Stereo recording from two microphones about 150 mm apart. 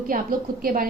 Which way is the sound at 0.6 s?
75° right (ahead or behind).